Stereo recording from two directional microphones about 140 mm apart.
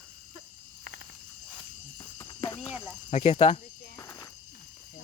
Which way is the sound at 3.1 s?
55° left (ahead or behind).